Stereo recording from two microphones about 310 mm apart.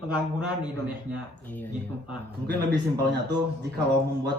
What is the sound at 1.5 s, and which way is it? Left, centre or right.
Speech, centre.